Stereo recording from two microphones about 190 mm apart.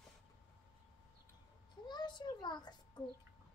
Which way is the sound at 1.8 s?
25° left (ahead or behind).